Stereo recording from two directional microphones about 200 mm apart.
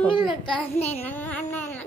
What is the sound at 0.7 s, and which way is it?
Speech, 30° left (ahead or behind).